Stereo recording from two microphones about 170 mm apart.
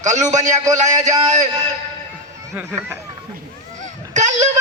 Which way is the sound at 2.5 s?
15° right (ahead or behind).